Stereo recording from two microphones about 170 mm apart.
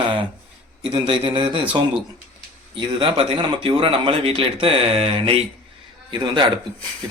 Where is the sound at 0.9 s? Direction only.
30° right (ahead or behind).